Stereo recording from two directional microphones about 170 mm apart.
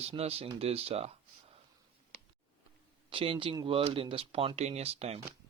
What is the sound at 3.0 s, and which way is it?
Speech, 30° right (ahead or behind).